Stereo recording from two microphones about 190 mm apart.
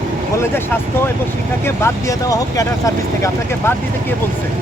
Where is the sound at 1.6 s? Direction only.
15° left (ahead or behind).